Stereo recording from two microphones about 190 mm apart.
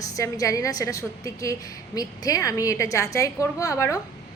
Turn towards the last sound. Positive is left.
turn(degrees=15)  # may be behind; listen again after turning